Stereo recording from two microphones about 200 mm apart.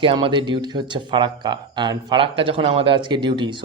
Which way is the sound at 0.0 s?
25° right (ahead or behind).